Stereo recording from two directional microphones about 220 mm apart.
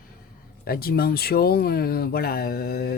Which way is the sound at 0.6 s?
45° left (ahead or behind).